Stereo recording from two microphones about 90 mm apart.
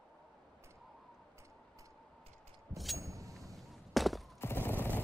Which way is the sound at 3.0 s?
35° right (ahead or behind).